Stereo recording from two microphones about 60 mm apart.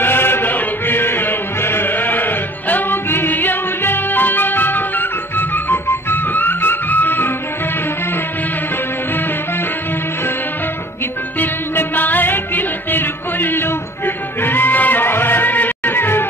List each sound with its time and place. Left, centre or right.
0.0 s music: left
11.3 s music: left